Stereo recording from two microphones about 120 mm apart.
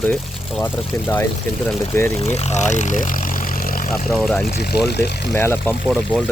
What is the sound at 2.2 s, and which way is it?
Speech, 60° left (ahead or behind).